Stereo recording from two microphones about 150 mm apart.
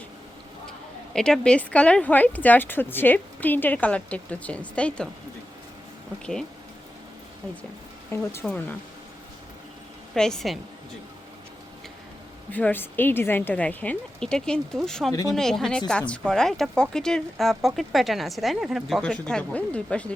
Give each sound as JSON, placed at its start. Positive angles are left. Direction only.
{"t": 1.1, "sound": "speech", "side_deg": 5}
{"t": 8.1, "sound": "speech", "side_deg": 15}
{"t": 10.2, "sound": "a woman's voice", "side_deg": 5}
{"t": 12.5, "sound": "a woman's voice", "side_deg": 10}